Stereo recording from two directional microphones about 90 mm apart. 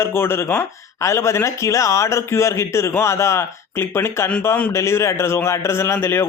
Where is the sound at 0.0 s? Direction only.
25° left (ahead or behind).